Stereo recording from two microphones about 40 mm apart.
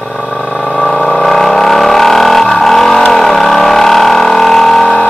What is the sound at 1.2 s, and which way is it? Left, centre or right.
Vehicle, centre.